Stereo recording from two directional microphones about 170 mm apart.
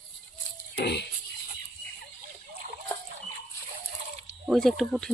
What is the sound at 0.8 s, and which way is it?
Music, 75° left (ahead or behind).